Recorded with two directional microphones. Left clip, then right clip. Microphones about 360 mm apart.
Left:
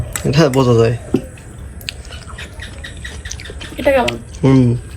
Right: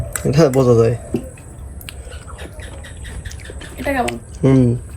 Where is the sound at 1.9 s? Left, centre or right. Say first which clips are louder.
Left 9 dB; centre.